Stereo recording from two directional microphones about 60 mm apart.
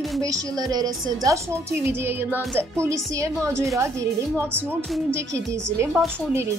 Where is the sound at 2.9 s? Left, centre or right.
Right.